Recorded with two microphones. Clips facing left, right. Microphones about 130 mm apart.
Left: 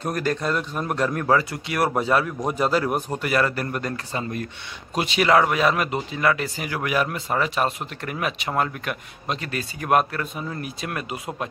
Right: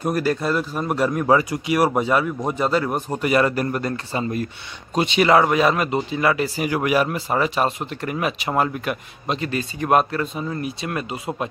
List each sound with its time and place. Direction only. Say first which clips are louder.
0.0 s speech: right 3 dB; 5° right (ahead or behind)
3.6 s speech: right 4 dB; centre (ahead or behind)